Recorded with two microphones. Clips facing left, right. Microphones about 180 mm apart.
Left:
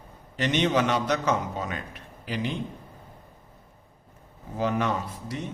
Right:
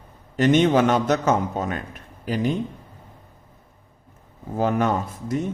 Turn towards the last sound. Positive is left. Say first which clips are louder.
# right 8 dB
turn(degrees=-45)  # may be behind; listen again after turning